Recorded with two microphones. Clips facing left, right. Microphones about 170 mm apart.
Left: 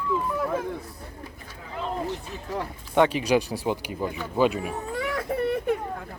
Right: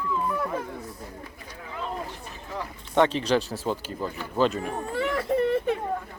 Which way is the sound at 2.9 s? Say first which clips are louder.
Left 1 dB; 10° left (ahead or behind).